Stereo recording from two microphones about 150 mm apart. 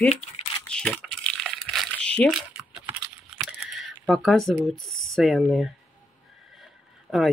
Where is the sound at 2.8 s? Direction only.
10° right (ahead or behind).